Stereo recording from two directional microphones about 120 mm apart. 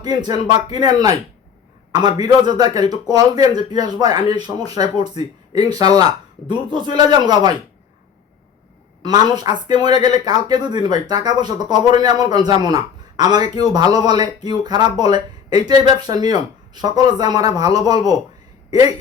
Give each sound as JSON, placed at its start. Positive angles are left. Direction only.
{"t": 0.0, "sound": "speech", "side_deg": -35}
{"t": 2.2, "sound": "speech", "side_deg": -35}
{"t": 9.0, "sound": "speech", "side_deg": -35}